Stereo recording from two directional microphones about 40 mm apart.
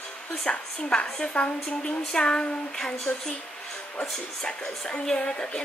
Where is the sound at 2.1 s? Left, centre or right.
Centre.